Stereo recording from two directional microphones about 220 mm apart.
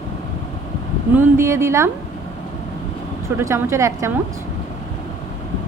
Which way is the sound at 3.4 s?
10° right (ahead or behind).